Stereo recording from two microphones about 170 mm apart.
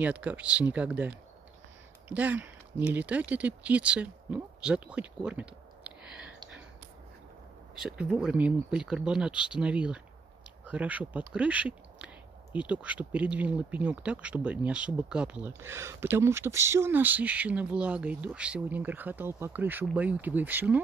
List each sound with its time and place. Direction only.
0.0 s speech: 10° right (ahead or behind)
7.8 s speech: 5° right (ahead or behind)